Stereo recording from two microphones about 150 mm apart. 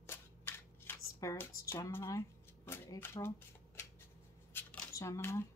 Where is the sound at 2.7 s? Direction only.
15° left (ahead or behind).